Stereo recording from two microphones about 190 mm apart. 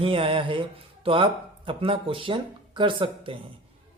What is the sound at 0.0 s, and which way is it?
Speech, 30° right (ahead or behind).